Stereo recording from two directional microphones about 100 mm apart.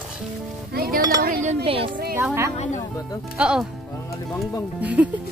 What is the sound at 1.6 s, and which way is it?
Speech, 65° right (ahead or behind).